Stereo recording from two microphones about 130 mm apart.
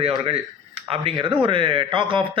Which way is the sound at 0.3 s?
50° right (ahead or behind).